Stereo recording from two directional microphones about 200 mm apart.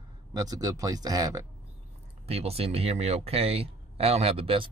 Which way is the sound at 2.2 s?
30° right (ahead or behind).